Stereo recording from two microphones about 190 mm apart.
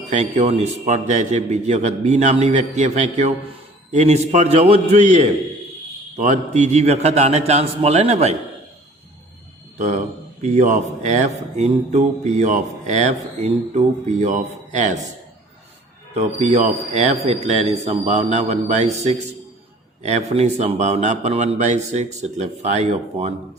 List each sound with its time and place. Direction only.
0.1 s speech: 35° right (ahead or behind)
9.7 s speech: 40° right (ahead or behind)
16.1 s speech: 35° right (ahead or behind)